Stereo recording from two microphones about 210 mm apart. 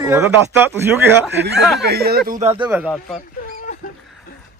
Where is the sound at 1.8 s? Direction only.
50° right (ahead or behind).